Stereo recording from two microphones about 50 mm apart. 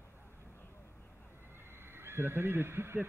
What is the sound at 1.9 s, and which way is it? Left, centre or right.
Speech, right.